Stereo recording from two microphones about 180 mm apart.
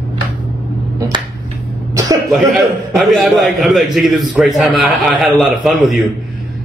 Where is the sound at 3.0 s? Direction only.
Centre (ahead or behind).